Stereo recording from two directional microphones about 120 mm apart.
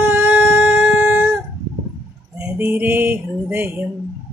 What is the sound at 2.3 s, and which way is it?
Speech, 15° right (ahead or behind).